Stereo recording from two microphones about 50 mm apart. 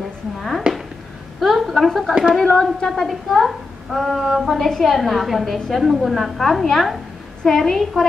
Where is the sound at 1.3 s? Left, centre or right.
Centre.